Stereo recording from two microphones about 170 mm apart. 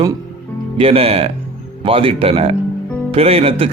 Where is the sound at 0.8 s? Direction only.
35° right (ahead or behind).